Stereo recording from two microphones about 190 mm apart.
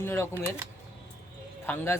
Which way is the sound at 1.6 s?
10° left (ahead or behind).